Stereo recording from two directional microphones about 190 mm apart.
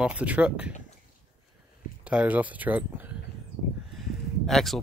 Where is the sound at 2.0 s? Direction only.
10° right (ahead or behind).